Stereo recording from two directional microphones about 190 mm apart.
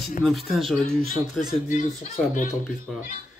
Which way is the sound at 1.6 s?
40° left (ahead or behind).